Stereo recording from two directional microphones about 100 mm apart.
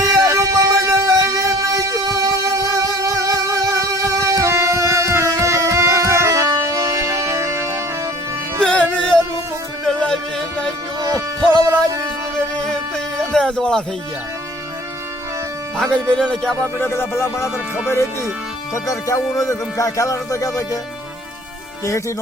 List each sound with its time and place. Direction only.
0.0 s music: 35° right (ahead or behind)
8.6 s music: 10° left (ahead or behind)
13.1 s a sound: 5° left (ahead or behind)
15.8 s music: 5° left (ahead or behind)
16.7 s speech: 20° left (ahead or behind)